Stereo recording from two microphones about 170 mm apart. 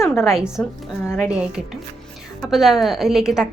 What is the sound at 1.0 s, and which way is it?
Speech, 15° left (ahead or behind).